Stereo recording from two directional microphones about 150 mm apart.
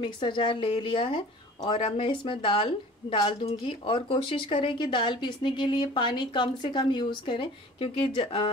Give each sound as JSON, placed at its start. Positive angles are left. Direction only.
{"t": 0.0, "sound": "speech", "side_deg": 30}